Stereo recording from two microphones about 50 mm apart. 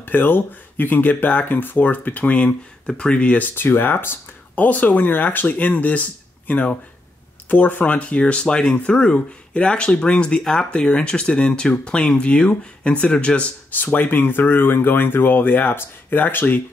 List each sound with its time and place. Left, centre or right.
0.0 s speech: left
3.4 s speech: left
4.6 s speech: left; by 13.5 s centre
13.7 s speech: left